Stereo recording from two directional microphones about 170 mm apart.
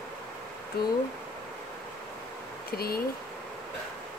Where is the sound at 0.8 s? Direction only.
65° left (ahead or behind).